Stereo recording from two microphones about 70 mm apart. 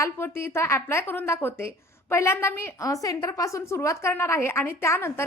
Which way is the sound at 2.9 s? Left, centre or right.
Left.